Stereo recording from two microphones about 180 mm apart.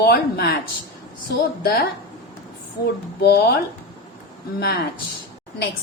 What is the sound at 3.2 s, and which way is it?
Speech, 65° left (ahead or behind).